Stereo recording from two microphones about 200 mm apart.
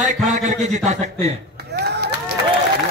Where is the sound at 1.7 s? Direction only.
55° right (ahead or behind).